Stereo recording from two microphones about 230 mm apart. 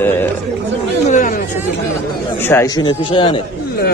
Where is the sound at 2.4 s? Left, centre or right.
Centre.